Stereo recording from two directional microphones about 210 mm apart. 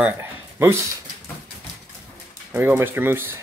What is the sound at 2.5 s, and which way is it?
Speech, 10° right (ahead or behind).